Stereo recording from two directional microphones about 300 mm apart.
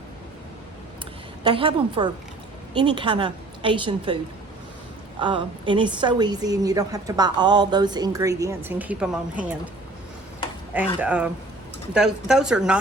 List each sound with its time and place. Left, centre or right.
1.5 s a woman's voice: centre
5.2 s a woman's voice: centre
11.0 s a woman's voice: centre